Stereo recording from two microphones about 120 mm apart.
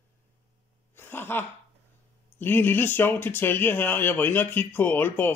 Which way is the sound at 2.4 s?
15° left (ahead or behind).